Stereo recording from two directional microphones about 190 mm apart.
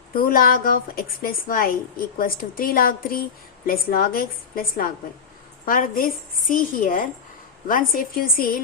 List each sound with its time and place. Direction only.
0.1 s a woman's voice: 50° left (ahead or behind)